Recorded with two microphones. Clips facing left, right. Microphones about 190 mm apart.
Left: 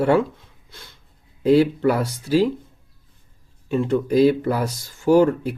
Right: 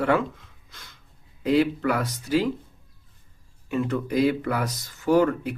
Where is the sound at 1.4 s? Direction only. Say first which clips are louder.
Left 5 dB; 30° left (ahead or behind).